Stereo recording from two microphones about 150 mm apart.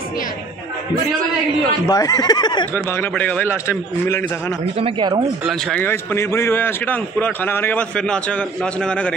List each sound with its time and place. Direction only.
1.9 s speech: 25° left (ahead or behind)
2.7 s a man's voice: 10° left (ahead or behind)
4.7 s speech: 35° right (ahead or behind)
5.4 s speech: centre (ahead or behind)
5.8 s a man's voice: 15° left (ahead or behind)